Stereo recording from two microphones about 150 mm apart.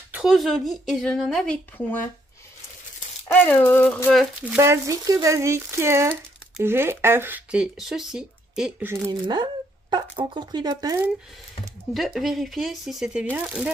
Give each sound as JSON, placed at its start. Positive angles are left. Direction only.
{"t": 0.1, "sound": "a woman's voice", "side_deg": -5}
{"t": 3.3, "sound": "speech", "side_deg": 10}
{"t": 4.1, "sound": "a woman's voice", "side_deg": -5}
{"t": 4.6, "sound": "speech", "side_deg": -20}
{"t": 9.2, "sound": "speech", "side_deg": -30}
{"t": 11.9, "sound": "a woman's voice", "side_deg": 0}